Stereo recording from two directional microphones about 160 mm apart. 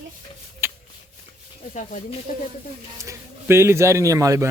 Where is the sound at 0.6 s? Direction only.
15° right (ahead or behind).